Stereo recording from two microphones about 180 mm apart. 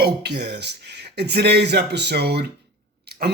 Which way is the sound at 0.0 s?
65° right (ahead or behind).